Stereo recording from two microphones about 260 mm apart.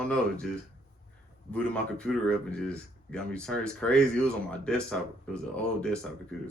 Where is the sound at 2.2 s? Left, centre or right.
Centre.